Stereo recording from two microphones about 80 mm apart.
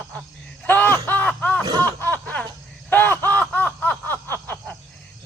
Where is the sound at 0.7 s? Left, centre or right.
Left.